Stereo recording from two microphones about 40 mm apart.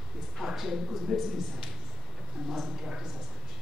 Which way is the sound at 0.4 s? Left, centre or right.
Centre.